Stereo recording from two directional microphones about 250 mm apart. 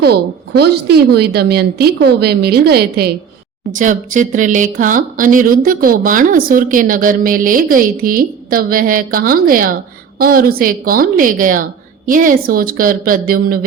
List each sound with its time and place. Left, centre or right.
0.0 s speech: right